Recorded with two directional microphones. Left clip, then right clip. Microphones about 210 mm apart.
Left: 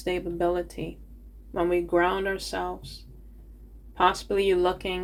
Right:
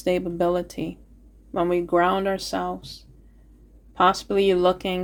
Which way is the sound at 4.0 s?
55° right (ahead or behind).